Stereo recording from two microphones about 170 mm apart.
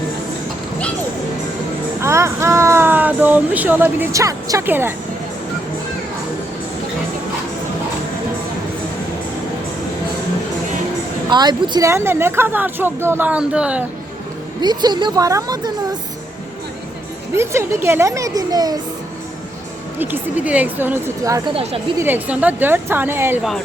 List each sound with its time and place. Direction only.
2.0 s speech: 15° right (ahead or behind)
11.3 s speech: 25° right (ahead or behind); by 13.8 s 5° right (ahead or behind)
14.6 s a woman's voice: 25° right (ahead or behind)
17.3 s speech: 15° right (ahead or behind)
20.0 s speech: 10° right (ahead or behind)
21.5 s a woman's voice: 35° right (ahead or behind)
21.9 s speech: 10° right (ahead or behind)